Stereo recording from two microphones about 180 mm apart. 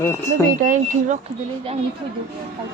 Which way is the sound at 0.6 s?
45° right (ahead or behind).